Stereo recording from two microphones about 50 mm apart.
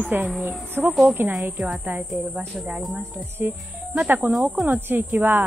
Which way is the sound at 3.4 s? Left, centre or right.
Right.